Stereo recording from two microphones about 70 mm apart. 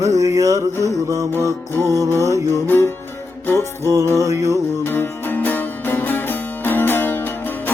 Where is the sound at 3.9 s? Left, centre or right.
Right.